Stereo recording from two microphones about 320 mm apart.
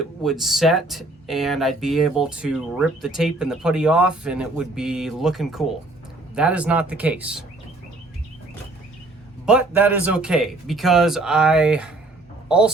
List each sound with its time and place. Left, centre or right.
0.0 s speech: centre
9.5 s speech: centre